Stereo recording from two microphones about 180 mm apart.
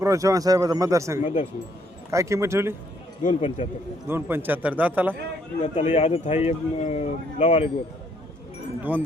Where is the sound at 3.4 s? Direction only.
40° left (ahead or behind).